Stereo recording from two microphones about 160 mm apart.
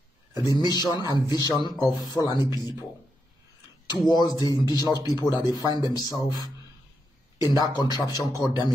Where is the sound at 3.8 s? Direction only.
25° left (ahead or behind).